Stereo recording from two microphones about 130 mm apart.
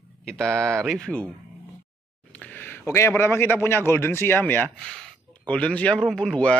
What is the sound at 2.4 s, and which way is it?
A man's voice, 15° left (ahead or behind).